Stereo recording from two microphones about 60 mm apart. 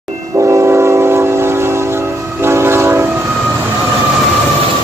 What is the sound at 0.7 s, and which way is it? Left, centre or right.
Train, right.